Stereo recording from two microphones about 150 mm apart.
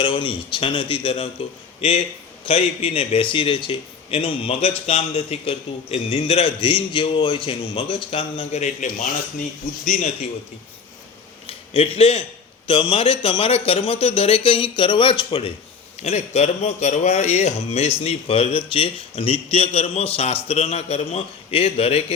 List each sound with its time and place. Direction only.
0.0 s a man's voice: 35° left (ahead or behind); by 10.2 s 50° left (ahead or behind)
11.7 s a man's voice: 40° left (ahead or behind)
16.0 s speech: 45° left (ahead or behind)